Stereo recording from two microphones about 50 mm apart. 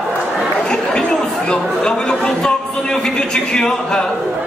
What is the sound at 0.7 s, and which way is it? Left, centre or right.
Chatter, centre.